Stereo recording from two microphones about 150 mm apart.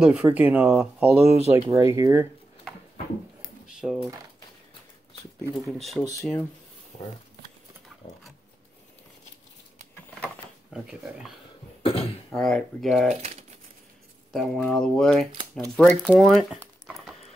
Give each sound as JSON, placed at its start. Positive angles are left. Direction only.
{"t": 0.0, "sound": "speech", "side_deg": -5}
{"t": 1.5, "sound": "speech", "side_deg": -20}
{"t": 3.6, "sound": "typewriter", "side_deg": 0}
{"t": 5.7, "sound": "speech", "side_deg": 0}
{"t": 10.7, "sound": "speech", "side_deg": -5}
{"t": 11.8, "sound": "speech", "side_deg": 40}
{"t": 12.4, "sound": "speech", "side_deg": 5}
{"t": 13.1, "sound": "speech", "side_deg": -45}
{"t": 14.3, "sound": "speech", "side_deg": 0}
{"t": 16.1, "sound": "a sound", "side_deg": 0}